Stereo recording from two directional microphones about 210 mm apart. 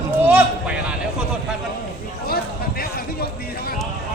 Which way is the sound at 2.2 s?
45° left (ahead or behind).